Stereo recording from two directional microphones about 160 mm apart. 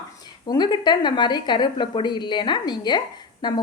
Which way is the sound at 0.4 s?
25° left (ahead or behind).